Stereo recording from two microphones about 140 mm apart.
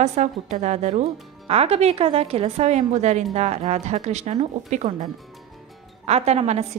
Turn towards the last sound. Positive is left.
turn(degrees=-50)  # may be behind; listen again after turning